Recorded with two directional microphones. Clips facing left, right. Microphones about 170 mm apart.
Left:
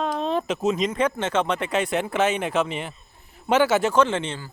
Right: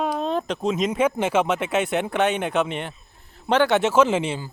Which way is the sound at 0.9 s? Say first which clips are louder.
Right 3 dB; 10° right (ahead or behind).